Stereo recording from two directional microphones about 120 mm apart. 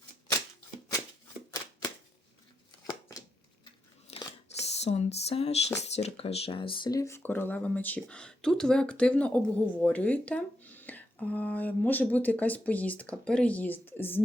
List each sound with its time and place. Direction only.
4.1 s scissors: 55° left (ahead or behind)
4.7 s speech: 65° left (ahead or behind); by 6.9 s 45° left (ahead or behind)
6.9 s speech: 25° left (ahead or behind)